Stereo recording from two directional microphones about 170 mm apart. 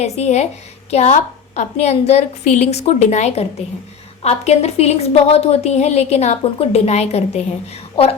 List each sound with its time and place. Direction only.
0.0 s a woman's voice: 40° left (ahead or behind)